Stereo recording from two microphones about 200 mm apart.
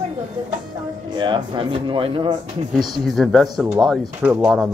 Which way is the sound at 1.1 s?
25° right (ahead or behind).